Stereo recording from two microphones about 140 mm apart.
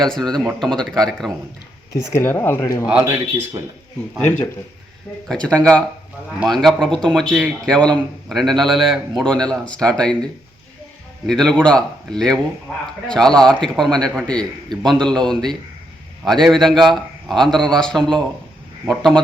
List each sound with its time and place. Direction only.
0.0 s a man's voice: 5° left (ahead or behind)
1.9 s speech: 20° left (ahead or behind)
3.0 s speech: 15° right (ahead or behind)
5.3 s a man's voice: 5° left (ahead or behind)
11.3 s a man's voice: 5° left (ahead or behind)